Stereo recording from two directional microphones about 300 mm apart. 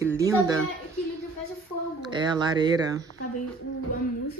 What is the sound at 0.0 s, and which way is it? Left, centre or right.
Speech, centre.